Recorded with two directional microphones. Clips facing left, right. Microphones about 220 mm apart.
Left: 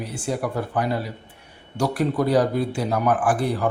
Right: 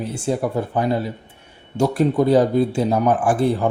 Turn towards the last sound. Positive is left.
turn(degrees=-25)  # may be behind; listen again after turning